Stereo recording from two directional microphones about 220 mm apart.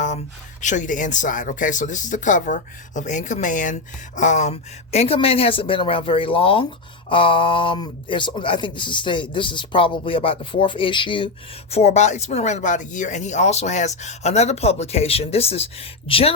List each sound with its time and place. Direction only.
0.6 s speech: 35° left (ahead or behind)